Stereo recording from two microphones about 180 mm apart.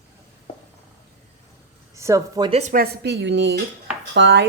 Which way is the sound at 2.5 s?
45° right (ahead or behind).